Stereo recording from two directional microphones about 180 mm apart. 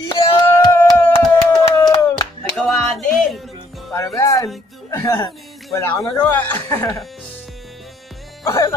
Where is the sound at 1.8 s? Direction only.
20° left (ahead or behind).